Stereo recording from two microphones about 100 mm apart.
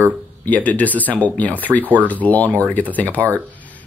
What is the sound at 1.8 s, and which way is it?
Speech, 15° right (ahead or behind).